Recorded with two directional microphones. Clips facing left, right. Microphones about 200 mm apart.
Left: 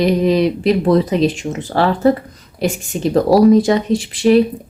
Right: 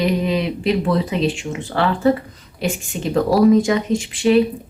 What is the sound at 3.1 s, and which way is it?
Speech, 35° left (ahead or behind).